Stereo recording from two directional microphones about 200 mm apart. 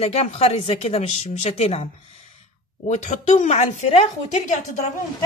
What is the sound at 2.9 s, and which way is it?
Speech, 35° left (ahead or behind).